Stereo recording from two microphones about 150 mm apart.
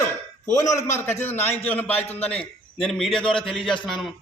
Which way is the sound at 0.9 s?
15° left (ahead or behind).